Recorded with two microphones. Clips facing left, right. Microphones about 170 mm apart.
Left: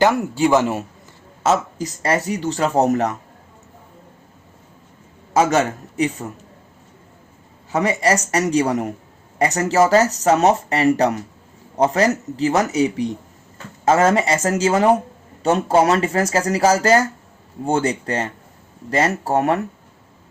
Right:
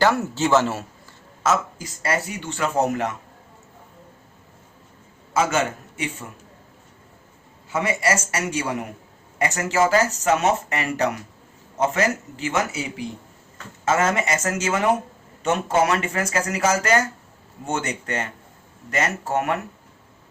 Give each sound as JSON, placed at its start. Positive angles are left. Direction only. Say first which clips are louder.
{"t": 0.0, "sound": "a man's voice", "louder": "left 4 dB", "side_deg": 15}
{"t": 1.5, "sound": "speech", "louder": "left 4 dB", "side_deg": 35}
{"t": 5.3, "sound": "a man's voice", "louder": "left 5 dB", "side_deg": 35}
{"t": 7.7, "sound": "speech", "louder": "left 4 dB", "side_deg": 35}